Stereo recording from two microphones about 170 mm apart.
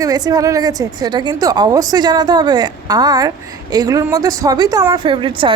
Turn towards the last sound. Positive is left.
turn(degrees=-30)  # may be behind; listen again after turning